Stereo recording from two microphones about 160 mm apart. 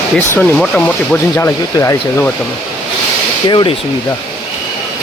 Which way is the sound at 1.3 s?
20° left (ahead or behind).